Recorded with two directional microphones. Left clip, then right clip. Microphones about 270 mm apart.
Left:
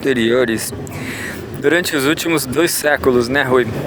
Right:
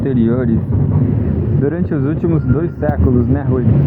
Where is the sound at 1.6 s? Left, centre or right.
Left.